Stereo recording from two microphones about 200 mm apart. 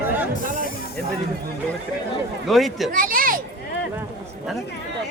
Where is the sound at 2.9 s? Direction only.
45° right (ahead or behind).